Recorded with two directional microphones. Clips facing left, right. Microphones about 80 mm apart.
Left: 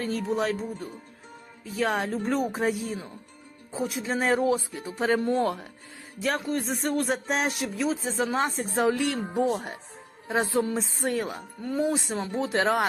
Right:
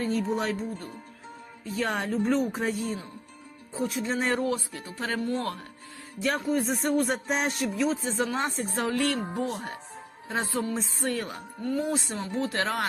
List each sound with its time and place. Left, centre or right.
0.0 s speech: centre
1.6 s speech: centre
4.9 s speech: left
6.2 s speech: centre
8.7 s speech: centre